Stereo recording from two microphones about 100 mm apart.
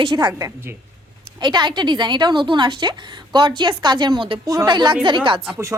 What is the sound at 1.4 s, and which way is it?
A woman's voice, 50° right (ahead or behind).